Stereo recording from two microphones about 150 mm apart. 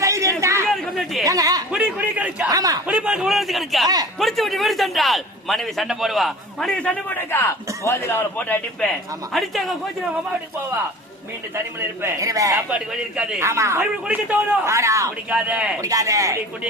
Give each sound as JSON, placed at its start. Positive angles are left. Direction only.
{"t": 0.0, "sound": "chatter", "side_deg": -20}
{"t": 0.8, "sound": "chatter", "side_deg": 0}
{"t": 1.2, "sound": "speech", "side_deg": -25}
{"t": 1.7, "sound": "a man's voice", "side_deg": -5}
{"t": 2.5, "sound": "speech", "side_deg": -25}
{"t": 2.8, "sound": "a man's voice", "side_deg": -5}
{"t": 12.0, "sound": "a man's voice", "side_deg": -20}
{"t": 15.3, "sound": "a man's voice", "side_deg": -10}
{"t": 15.8, "sound": "speech", "side_deg": -20}